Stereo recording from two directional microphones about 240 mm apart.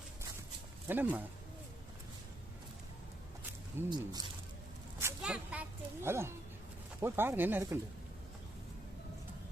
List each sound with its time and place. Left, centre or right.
0.9 s speech: centre
3.8 s speech: centre
4.9 s zipper: centre
7.0 s speech: centre